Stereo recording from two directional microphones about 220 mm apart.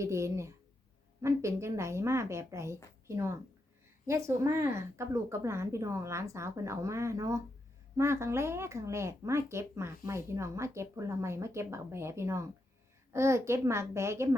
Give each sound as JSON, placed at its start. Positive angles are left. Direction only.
{"t": 0.0, "sound": "speech", "side_deg": -15}